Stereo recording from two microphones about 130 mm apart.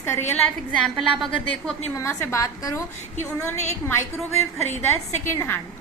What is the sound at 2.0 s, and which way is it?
A woman's voice, 20° left (ahead or behind).